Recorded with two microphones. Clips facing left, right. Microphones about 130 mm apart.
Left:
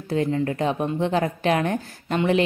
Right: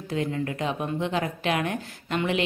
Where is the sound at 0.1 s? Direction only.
35° left (ahead or behind).